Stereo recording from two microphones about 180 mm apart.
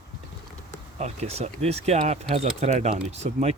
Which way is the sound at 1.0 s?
35° right (ahead or behind).